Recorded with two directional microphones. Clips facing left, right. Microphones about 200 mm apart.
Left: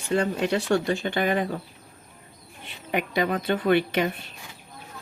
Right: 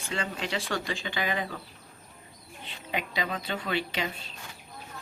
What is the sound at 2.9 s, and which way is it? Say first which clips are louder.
Speech: left 8 dB; 55° left (ahead or behind).